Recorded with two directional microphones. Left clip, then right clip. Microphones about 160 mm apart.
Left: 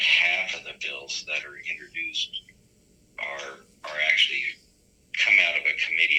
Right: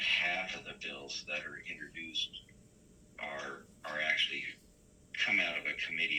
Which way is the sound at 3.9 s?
45° left (ahead or behind).